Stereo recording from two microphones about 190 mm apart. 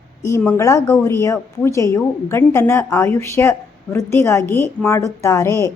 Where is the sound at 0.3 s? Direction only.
15° left (ahead or behind).